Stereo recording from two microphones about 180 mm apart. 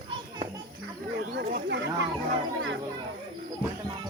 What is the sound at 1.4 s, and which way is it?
Speech, 85° right.